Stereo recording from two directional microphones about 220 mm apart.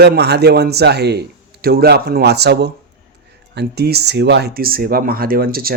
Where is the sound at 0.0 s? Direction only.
50° right (ahead or behind).